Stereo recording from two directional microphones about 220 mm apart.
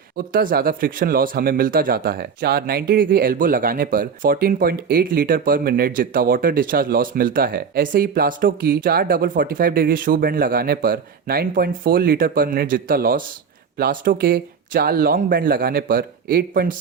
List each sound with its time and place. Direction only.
0.3 s speech: 40° right (ahead or behind)